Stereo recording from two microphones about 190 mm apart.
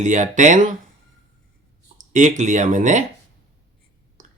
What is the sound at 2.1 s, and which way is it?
Speech, 40° right (ahead or behind).